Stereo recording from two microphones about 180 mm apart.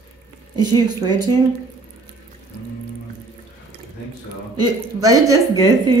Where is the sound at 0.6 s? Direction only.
20° right (ahead or behind).